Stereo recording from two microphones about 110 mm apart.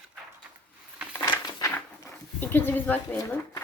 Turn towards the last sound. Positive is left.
turn(degrees=15)  # may be behind; listen again after turning